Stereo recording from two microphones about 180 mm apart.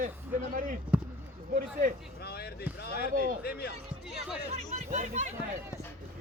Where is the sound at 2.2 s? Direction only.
60° left (ahead or behind).